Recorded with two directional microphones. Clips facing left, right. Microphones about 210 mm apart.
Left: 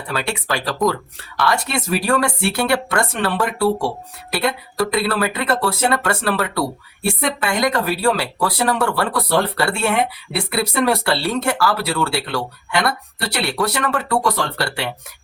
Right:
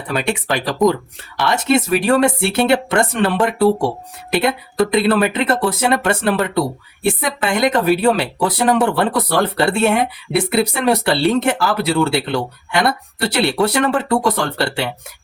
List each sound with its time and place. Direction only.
0.1 s speech: 20° right (ahead or behind)